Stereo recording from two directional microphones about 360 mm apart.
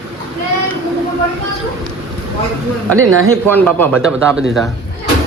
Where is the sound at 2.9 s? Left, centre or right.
Right.